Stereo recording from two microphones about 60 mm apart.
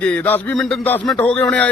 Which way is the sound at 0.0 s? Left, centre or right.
Centre.